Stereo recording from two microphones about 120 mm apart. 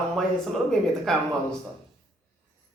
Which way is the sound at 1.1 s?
5° left (ahead or behind).